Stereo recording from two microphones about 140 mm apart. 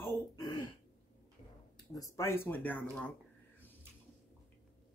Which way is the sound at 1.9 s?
20° left (ahead or behind).